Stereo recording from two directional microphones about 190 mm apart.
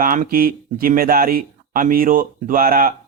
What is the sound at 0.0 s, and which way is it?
Speech, 45° right (ahead or behind).